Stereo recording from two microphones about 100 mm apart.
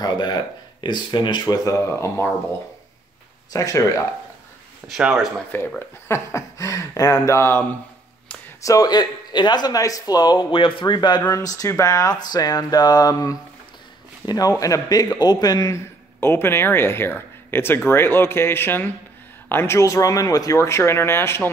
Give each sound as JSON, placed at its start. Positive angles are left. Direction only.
{"t": 0.0, "sound": "speech", "side_deg": 45}
{"t": 3.5, "sound": "speech", "side_deg": 35}
{"t": 4.8, "sound": "speech", "side_deg": -5}
{"t": 5.8, "sound": "speech", "side_deg": 25}
{"t": 8.6, "sound": "speech", "side_deg": 40}
{"t": 10.5, "sound": "speech", "side_deg": 55}
{"t": 11.3, "sound": "speech", "side_deg": 35}
{"t": 16.2, "sound": "speech", "side_deg": 25}